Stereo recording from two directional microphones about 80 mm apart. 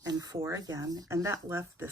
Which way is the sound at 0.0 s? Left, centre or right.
Right.